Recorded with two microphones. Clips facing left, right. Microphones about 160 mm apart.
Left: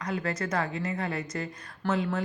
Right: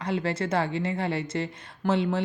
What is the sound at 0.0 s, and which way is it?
A woman's voice, 30° right (ahead or behind).